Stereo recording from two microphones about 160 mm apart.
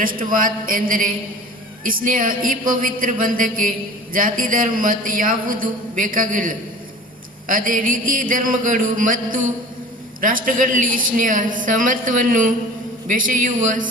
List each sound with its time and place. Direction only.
0.0 s a man's voice: 60° right (ahead or behind)